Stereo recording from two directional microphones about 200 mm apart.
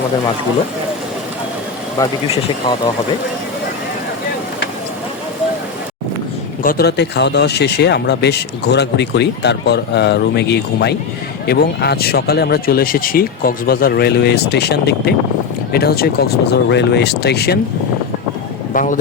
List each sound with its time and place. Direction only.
2.0 s speech: 15° left (ahead or behind)
6.6 s speech: 45° left (ahead or behind)
18.7 s speech: 40° left (ahead or behind)